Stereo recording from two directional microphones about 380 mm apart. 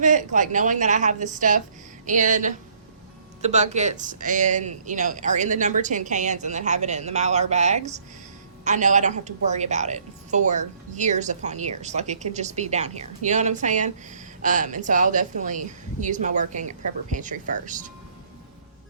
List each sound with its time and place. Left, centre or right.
0.0 s a woman's voice: centre